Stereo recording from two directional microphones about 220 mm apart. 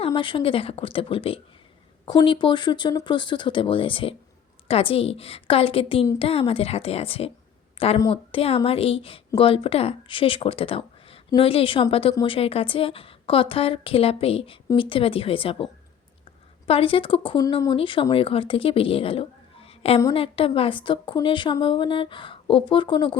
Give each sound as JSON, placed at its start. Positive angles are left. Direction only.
{"t": 0.0, "sound": "a woman's voice", "side_deg": 20}
{"t": 16.6, "sound": "a woman's voice", "side_deg": 25}